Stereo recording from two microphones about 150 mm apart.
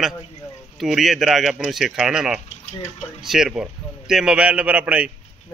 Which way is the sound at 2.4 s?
50° left (ahead or behind).